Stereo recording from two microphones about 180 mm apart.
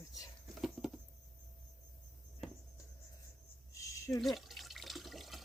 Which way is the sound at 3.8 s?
15° left (ahead or behind).